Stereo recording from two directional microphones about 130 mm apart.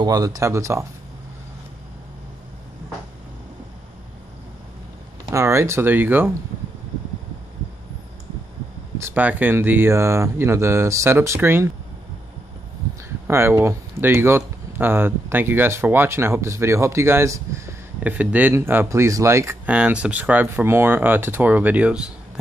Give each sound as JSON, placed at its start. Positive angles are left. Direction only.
{"t": 0.0, "sound": "speech", "side_deg": -30}
{"t": 5.3, "sound": "speech", "side_deg": -20}
{"t": 8.9, "sound": "speech", "side_deg": -15}
{"t": 13.3, "sound": "speech", "side_deg": -20}
{"t": 19.6, "sound": "speech", "side_deg": -10}